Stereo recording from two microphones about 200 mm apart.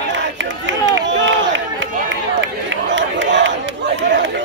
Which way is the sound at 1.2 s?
65° right (ahead or behind).